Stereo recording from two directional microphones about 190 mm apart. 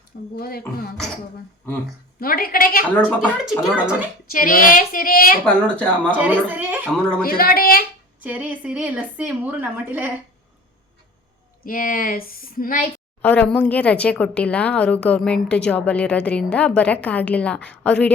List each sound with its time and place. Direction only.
0.3 s speech: 55° left (ahead or behind)
2.1 s speech: 50° left (ahead or behind)
2.9 s speech: 5° left (ahead or behind)
3.6 s speech: 5° right (ahead or behind)
4.3 s speech: 45° left (ahead or behind)
5.6 s speech: 5° left (ahead or behind)
6.1 s a woman's voice: 10° right (ahead or behind)
7.2 s speech: 50° left (ahead or behind)
8.2 s a woman's voice: 5° right (ahead or behind)
11.6 s speech: 45° left (ahead or behind)
13.2 s speech: 10° left (ahead or behind)